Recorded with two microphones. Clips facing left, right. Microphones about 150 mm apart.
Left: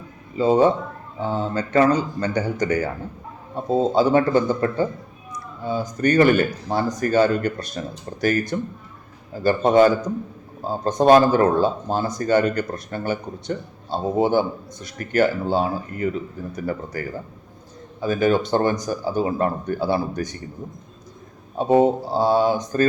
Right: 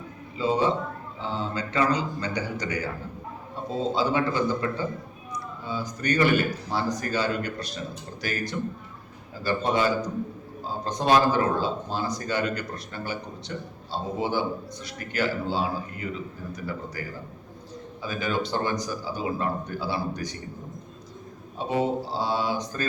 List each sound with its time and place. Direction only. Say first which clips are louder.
0.3 s speech: left 7 dB; 50° left (ahead or behind)
21.6 s speech: left 9 dB; 50° left (ahead or behind)